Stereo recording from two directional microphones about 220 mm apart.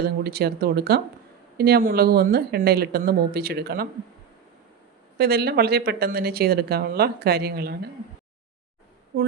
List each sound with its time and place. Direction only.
0.0 s speech: 45° right (ahead or behind)
5.1 s speech: 45° right (ahead or behind)